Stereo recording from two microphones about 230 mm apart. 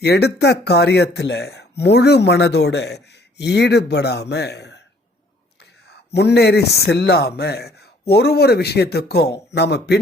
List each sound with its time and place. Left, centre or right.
0.0 s speech: left
6.1 s speech: left